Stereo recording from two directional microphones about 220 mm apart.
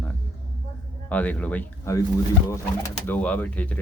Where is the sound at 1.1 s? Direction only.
5° left (ahead or behind).